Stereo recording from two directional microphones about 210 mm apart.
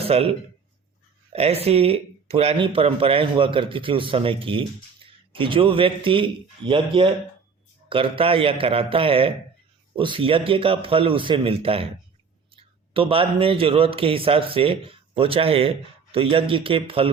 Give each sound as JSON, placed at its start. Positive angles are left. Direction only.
{"t": 0.0, "sound": "speech", "side_deg": -30}
{"t": 1.3, "sound": "speech", "side_deg": -30}
{"t": 12.9, "sound": "speech", "side_deg": -25}